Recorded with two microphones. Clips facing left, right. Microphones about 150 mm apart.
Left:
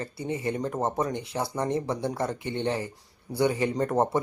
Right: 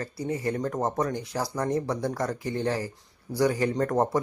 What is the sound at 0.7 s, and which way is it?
Speech, 5° left (ahead or behind).